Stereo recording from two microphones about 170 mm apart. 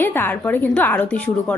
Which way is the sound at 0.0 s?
10° left (ahead or behind).